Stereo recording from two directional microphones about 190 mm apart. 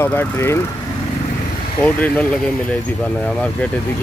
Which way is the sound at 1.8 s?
5° left (ahead or behind).